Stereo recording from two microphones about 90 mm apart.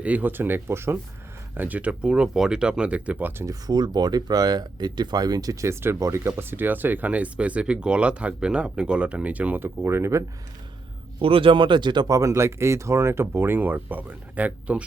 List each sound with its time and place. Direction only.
0.0 s speech: 20° right (ahead or behind)
3.4 s speech: 45° right (ahead or behind)
11.2 s speech: 90° right; by 14.8 s 15° right (ahead or behind)